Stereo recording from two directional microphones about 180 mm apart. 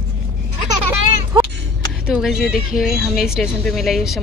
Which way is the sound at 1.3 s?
25° right (ahead or behind).